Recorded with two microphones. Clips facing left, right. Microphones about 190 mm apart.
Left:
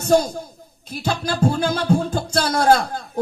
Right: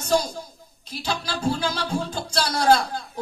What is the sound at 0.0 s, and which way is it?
A man's voice, 50° left (ahead or behind).